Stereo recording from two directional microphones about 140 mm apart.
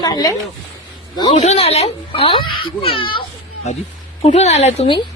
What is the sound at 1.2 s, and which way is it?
A child's voice, 45° left (ahead or behind).